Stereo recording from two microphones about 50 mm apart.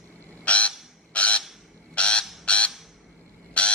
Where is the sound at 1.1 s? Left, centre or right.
Left.